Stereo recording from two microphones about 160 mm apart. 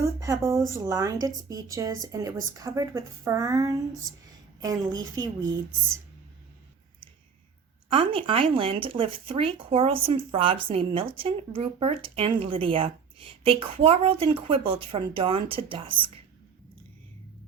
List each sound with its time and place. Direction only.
0.0 s a sound: 20° right (ahead or behind)
0.8 s speech: 20° right (ahead or behind)
7.9 s speech: 35° right (ahead or behind)